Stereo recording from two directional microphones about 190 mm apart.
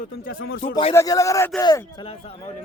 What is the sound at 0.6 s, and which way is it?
Speech, 35° left (ahead or behind).